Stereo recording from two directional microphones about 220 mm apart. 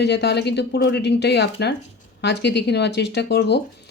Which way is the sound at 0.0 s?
50° left (ahead or behind).